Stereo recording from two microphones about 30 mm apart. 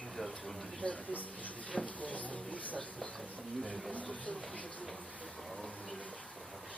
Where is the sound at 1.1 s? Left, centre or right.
Left.